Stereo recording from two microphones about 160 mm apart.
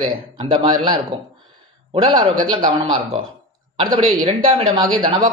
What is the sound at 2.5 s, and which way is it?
Speech, 30° right (ahead or behind).